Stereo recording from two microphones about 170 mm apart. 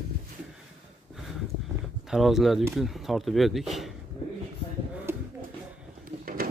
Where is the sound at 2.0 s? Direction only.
Centre (ahead or behind).